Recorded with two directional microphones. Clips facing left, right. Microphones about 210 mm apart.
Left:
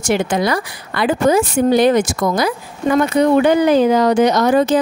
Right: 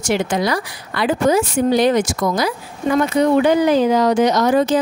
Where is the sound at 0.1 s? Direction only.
55° left (ahead or behind).